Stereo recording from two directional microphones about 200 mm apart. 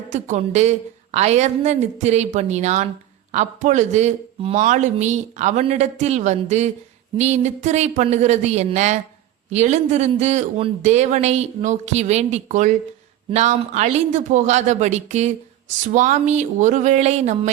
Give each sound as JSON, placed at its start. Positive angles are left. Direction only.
{"t": 0.1, "sound": "a man's voice", "side_deg": -35}